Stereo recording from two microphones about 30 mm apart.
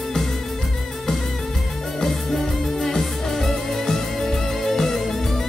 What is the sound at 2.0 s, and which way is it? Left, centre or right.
Music, centre.